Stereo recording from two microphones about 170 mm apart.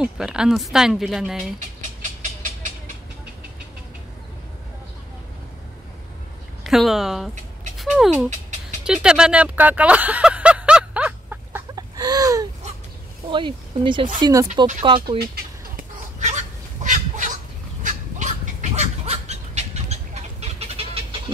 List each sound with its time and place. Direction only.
0.0 s speech: 5° right (ahead or behind)
2.0 s train: 45° right (ahead or behind)
6.6 s speech: centre (ahead or behind)
7.7 s cat: centre (ahead or behind)
8.8 s a sound: 5° right (ahead or behind)
11.7 s a sound: 25° right (ahead or behind)
13.3 s speech: 30° right (ahead or behind)
15.7 s fowl: 45° right (ahead or behind)
17.8 s a sound: 45° right (ahead or behind)